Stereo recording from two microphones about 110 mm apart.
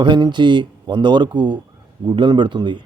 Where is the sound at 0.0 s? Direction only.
45° right (ahead or behind).